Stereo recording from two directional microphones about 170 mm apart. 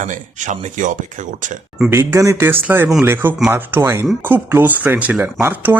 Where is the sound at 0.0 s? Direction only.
45° right (ahead or behind).